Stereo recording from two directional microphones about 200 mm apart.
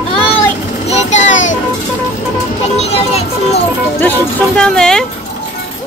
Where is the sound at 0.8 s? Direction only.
35° left (ahead or behind).